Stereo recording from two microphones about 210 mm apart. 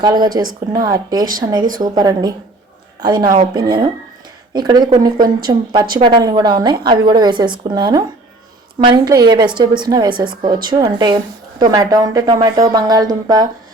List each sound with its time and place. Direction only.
0.0 s a woman's voice: 20° right (ahead or behind)